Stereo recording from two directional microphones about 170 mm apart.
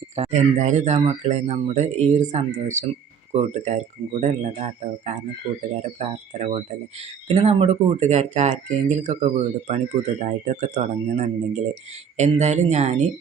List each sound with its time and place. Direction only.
0.2 s speech: 45° right (ahead or behind)
6.0 s speech: 40° right (ahead or behind)